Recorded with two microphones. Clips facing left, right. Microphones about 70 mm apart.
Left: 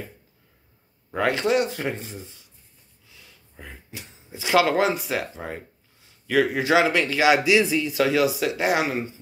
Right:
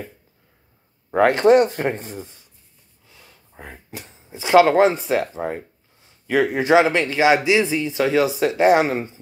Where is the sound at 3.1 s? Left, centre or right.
Right.